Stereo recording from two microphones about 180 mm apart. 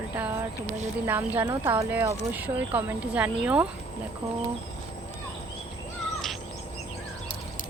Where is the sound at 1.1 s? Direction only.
10° right (ahead or behind).